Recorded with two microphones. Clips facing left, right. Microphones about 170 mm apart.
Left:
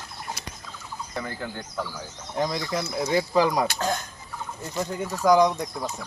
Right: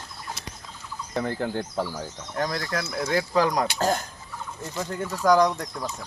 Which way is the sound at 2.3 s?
10° left (ahead or behind).